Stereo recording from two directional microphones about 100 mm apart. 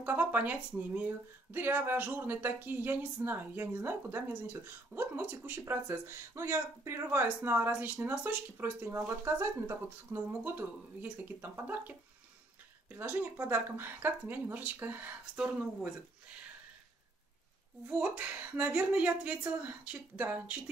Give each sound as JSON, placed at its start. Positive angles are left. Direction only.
{"t": 0.0, "sound": "speech", "side_deg": -20}
{"t": 12.9, "sound": "speech", "side_deg": -20}
{"t": 17.8, "sound": "speech", "side_deg": -15}